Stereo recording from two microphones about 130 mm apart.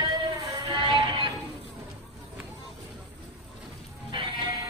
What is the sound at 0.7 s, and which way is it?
Music, 35° right (ahead or behind).